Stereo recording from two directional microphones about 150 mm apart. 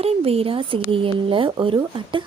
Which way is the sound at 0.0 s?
40° right (ahead or behind).